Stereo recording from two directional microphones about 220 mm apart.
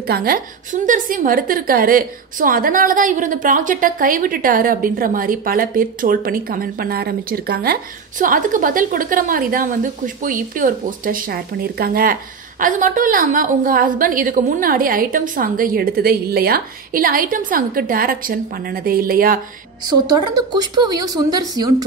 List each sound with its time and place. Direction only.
0.0 s a woman's voice: 45° right (ahead or behind)
19.9 s speech: 20° right (ahead or behind)